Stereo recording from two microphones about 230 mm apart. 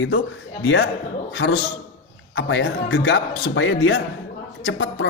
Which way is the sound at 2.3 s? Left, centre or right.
Left.